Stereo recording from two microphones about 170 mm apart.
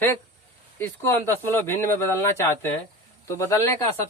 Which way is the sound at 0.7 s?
15° left (ahead or behind).